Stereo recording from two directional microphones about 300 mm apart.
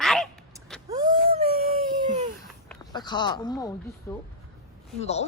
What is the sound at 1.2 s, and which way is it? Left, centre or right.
Dog, right.